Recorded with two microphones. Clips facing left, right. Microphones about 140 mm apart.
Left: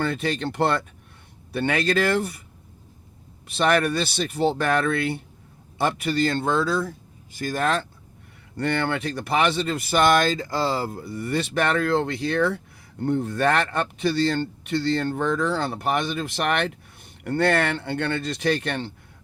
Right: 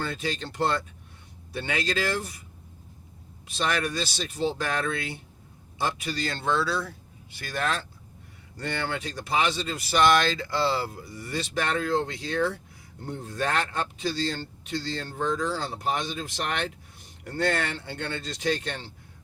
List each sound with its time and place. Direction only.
0.0 s speech: 60° left (ahead or behind)
3.5 s a man's voice: 60° left (ahead or behind)